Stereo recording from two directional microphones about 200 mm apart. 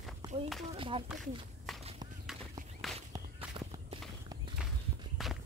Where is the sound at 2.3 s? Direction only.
Centre (ahead or behind).